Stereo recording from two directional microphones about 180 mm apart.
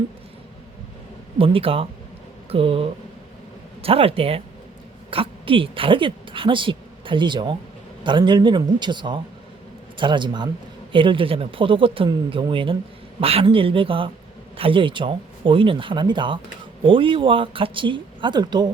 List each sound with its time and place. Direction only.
1.4 s a woman's voice: 30° right (ahead or behind)